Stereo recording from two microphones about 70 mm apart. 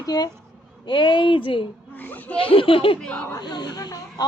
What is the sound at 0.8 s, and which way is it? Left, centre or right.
Speech, left.